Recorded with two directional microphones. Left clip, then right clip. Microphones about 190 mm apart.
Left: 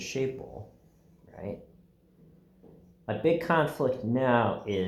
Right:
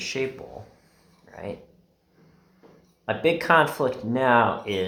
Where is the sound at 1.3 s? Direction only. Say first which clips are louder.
Right 4 dB; 20° right (ahead or behind).